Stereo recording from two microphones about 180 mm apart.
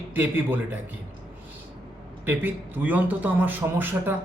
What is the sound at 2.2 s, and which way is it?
A man's voice, 10° right (ahead or behind).